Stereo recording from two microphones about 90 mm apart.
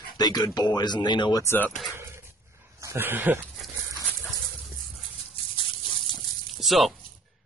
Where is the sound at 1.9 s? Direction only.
30° right (ahead or behind).